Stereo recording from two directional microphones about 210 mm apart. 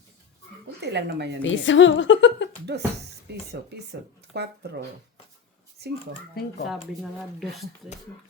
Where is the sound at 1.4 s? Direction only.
65° left (ahead or behind).